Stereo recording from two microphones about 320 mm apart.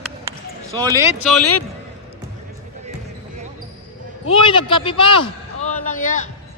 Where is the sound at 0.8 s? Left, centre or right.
Centre.